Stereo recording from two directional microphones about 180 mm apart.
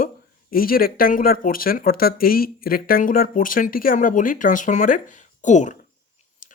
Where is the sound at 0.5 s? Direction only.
55° left (ahead or behind).